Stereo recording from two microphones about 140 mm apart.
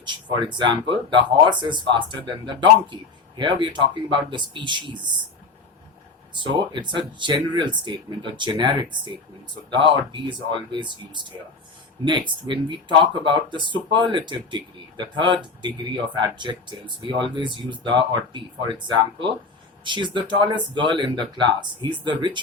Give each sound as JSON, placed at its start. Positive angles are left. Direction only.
{"t": 0.0, "sound": "speech", "side_deg": -35}
{"t": 6.4, "sound": "speech", "side_deg": -35}
{"t": 12.5, "sound": "speech", "side_deg": -35}